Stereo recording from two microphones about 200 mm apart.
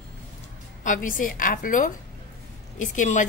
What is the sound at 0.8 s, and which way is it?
A woman's voice, 40° left (ahead or behind).